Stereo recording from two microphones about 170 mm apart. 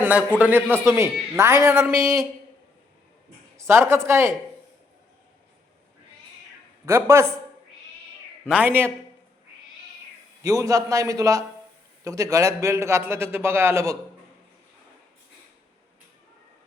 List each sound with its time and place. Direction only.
0.0 s a man's voice: 10° right (ahead or behind)
3.7 s a man's voice: 15° right (ahead or behind)
6.8 s a man's voice: 15° right (ahead or behind)
8.4 s a man's voice: 10° right (ahead or behind)
10.4 s a man's voice: 20° right (ahead or behind)